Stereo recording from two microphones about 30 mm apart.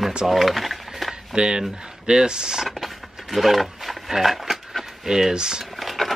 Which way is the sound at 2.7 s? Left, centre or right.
Centre.